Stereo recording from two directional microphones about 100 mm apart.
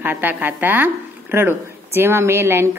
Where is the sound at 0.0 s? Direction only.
15° right (ahead or behind).